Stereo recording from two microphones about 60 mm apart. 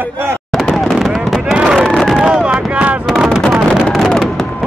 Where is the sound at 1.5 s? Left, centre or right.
Centre.